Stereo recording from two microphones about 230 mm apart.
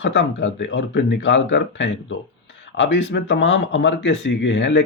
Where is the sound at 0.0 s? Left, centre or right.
Left.